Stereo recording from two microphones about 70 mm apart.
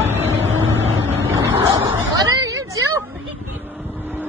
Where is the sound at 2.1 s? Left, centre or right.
Right.